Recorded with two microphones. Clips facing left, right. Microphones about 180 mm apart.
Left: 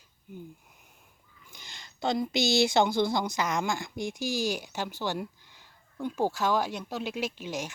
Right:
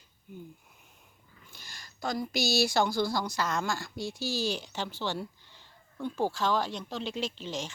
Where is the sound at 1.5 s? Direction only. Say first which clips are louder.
Left 2 dB; 20° left (ahead or behind).